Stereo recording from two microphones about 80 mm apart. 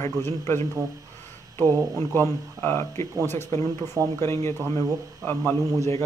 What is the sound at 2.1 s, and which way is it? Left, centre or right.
Speech, left.